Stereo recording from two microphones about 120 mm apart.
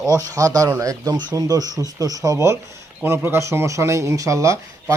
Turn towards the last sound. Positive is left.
turn(degrees=-25)  # may be behind; listen again after turning